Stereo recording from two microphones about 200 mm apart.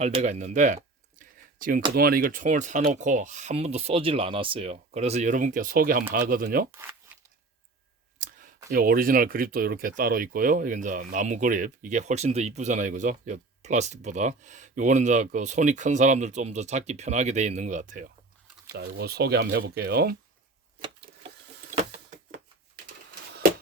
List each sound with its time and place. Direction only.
0.0 s a sound: 35° right (ahead or behind)
2.0 s speech: 45° right (ahead or behind)
8.2 s clicking: 40° right (ahead or behind)
8.7 s speech: 45° right (ahead or behind)
18.7 s speech: 50° right (ahead or behind)
21.8 s printer: 45° right (ahead or behind)